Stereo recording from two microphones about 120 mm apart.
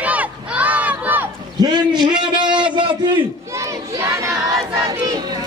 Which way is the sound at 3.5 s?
25° right (ahead or behind).